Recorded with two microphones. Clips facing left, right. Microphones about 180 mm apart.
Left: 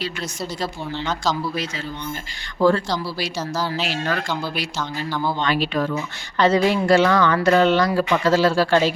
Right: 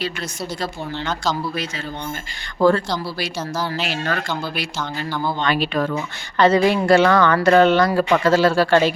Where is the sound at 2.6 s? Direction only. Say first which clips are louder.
Right 1 dB; 55° right (ahead or behind).